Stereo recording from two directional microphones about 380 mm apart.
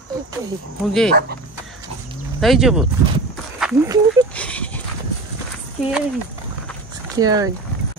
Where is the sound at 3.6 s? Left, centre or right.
Centre.